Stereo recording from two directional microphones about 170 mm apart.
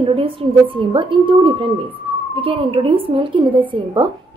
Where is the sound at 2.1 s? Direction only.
30° right (ahead or behind).